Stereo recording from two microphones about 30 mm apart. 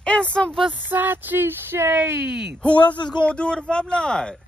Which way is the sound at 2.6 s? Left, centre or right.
Left.